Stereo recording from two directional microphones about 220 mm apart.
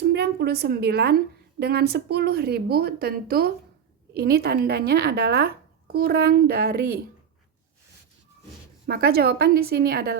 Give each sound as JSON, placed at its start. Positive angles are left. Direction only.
{"t": 0.0, "sound": "a woman's voice", "side_deg": -50}
{"t": 8.9, "sound": "a woman's voice", "side_deg": -45}